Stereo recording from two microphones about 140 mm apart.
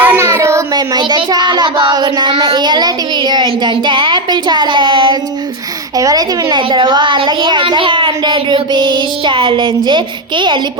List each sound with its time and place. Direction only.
0.0 s child singing: 15° right (ahead or behind); by 5.1 s 35° right (ahead or behind)
6.0 s a woman's voice: 25° right (ahead or behind)